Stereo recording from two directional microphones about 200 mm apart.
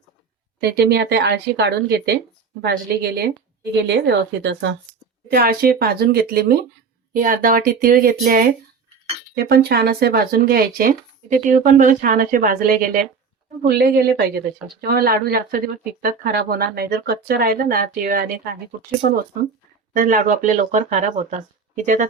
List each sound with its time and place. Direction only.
0.6 s a woman's voice: 55° right (ahead or behind)
5.3 s a woman's voice: 50° right (ahead or behind)
19.9 s speech: 40° right (ahead or behind)